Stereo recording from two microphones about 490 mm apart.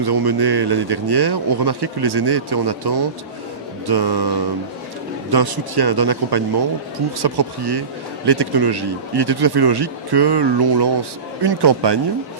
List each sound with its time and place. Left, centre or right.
0.0 s speech: right